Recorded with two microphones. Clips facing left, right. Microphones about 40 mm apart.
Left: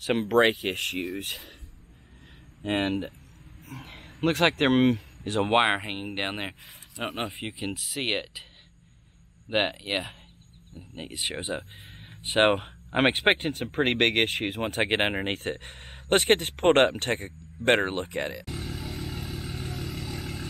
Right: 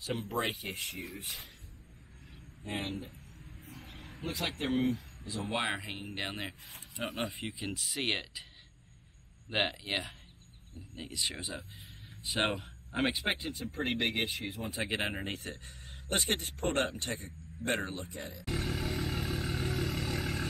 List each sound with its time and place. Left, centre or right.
0.0 s speech: left
2.6 s speech: left
3.6 s a sound: left
4.2 s speech: left
7.2 s speech: left
9.5 s speech: left
18.4 s vehicle: centre